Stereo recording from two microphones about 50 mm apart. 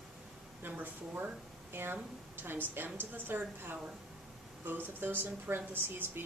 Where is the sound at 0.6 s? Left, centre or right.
Right.